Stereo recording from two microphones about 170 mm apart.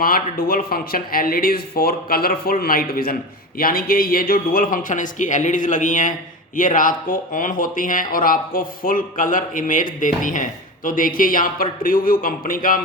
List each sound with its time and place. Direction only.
0.0 s speech: 60° left (ahead or behind)